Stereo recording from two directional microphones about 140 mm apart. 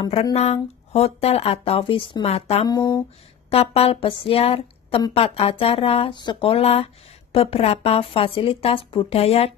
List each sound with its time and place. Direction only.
0.1 s speech: 50° left (ahead or behind)
2.6 s speech: 25° left (ahead or behind)
3.4 s a woman's voice: 45° left (ahead or behind)